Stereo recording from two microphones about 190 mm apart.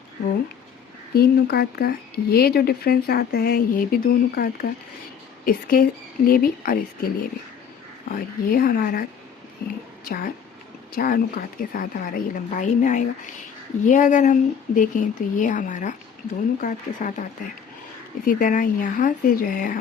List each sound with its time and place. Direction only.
1.1 s speech: 55° left (ahead or behind)
8.1 s speech: 50° left (ahead or behind)
10.1 s speech: 50° left (ahead or behind)
18.3 s speech: 45° left (ahead or behind)